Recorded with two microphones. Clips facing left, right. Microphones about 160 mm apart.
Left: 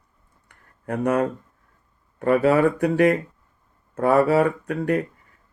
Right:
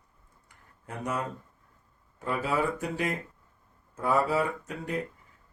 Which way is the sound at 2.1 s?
65° left (ahead or behind).